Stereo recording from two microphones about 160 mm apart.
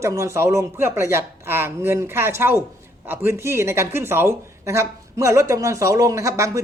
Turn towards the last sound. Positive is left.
turn(degrees=-20)  # may be behind; listen again after turning